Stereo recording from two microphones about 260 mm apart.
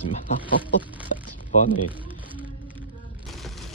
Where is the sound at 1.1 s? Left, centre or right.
Left.